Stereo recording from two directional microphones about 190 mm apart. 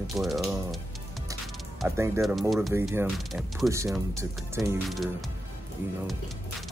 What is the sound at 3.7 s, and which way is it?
Speech, 15° right (ahead or behind).